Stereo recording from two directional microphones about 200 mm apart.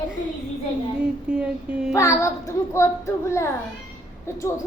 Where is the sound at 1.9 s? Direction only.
15° left (ahead or behind).